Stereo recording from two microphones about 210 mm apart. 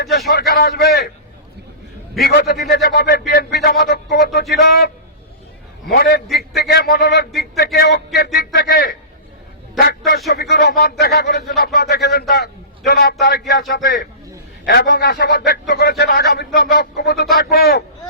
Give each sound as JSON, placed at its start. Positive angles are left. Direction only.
{"t": 0.3, "sound": "a man's voice", "side_deg": 45}
{"t": 2.2, "sound": "a man's voice", "side_deg": 50}
{"t": 6.0, "sound": "a man's voice", "side_deg": 50}